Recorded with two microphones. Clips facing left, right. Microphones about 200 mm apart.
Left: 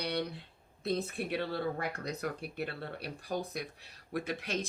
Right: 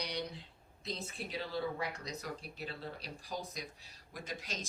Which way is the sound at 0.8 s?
60° left (ahead or behind).